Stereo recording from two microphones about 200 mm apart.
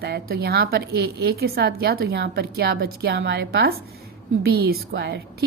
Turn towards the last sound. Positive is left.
turn(degrees=-55)  # may be behind; listen again after turning